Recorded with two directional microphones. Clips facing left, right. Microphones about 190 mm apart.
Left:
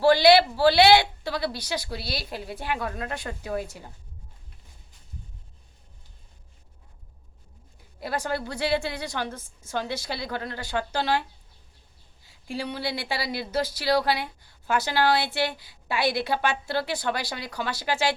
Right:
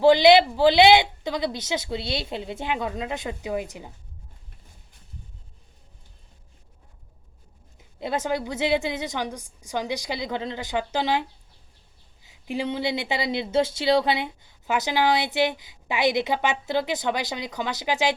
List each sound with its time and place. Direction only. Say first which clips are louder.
0.0 s speech: right 2 dB; 20° right (ahead or behind)
7.9 s a woman's voice: right 3 dB; 20° right (ahead or behind)
12.5 s speech: right 4 dB; 20° right (ahead or behind)